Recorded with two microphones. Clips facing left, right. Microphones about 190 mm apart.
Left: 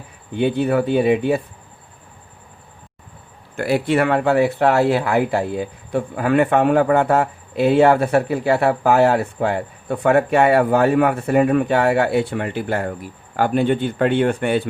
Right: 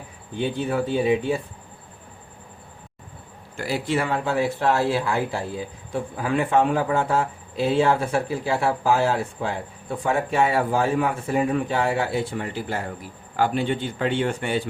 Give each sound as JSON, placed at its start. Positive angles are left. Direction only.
{"t": 0.3, "sound": "speech", "side_deg": 65}
{"t": 3.6, "sound": "speech", "side_deg": 60}